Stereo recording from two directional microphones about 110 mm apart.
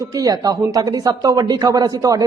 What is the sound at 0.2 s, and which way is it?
A man's voice, 35° right (ahead or behind).